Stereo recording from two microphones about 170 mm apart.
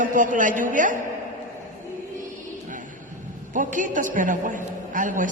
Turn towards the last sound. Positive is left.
turn(degrees=-50)  # may be behind; listen again after turning